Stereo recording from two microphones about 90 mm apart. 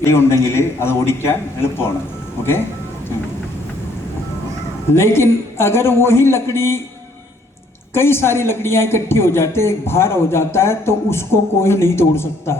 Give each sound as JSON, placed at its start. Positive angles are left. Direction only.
{"t": 0.0, "sound": "a man's voice", "side_deg": 30}
{"t": 4.9, "sound": "a man's voice", "side_deg": 30}
{"t": 7.9, "sound": "a man's voice", "side_deg": 30}